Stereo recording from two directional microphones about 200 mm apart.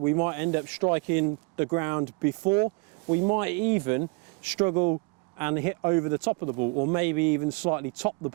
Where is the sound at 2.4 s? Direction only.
30° right (ahead or behind).